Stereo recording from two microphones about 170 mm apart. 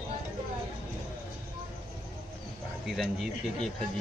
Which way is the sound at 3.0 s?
Centre (ahead or behind).